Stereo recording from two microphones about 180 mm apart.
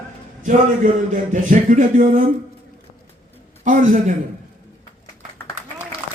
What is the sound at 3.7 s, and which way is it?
Speech, 45° right (ahead or behind).